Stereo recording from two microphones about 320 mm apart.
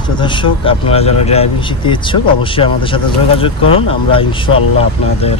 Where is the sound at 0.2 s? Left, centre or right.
Centre.